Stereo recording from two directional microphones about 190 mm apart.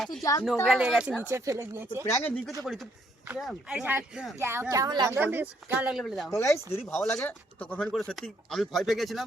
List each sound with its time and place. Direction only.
0.2 s speech: 20° left (ahead or behind)
0.7 s speech: 5° right (ahead or behind)
2.0 s speech: 15° left (ahead or behind)
3.2 s speech: centre (ahead or behind)
6.3 s speech: 15° left (ahead or behind)